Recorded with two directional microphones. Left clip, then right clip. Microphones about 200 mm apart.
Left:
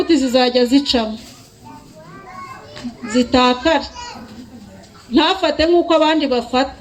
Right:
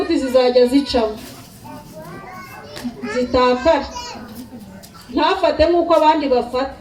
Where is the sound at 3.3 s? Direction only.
55° left (ahead or behind).